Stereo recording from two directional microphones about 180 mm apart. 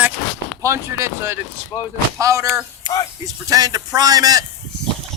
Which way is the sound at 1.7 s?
25° left (ahead or behind).